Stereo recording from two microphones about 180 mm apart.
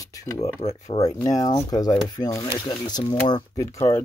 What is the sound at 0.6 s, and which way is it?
Speech, 35° left (ahead or behind).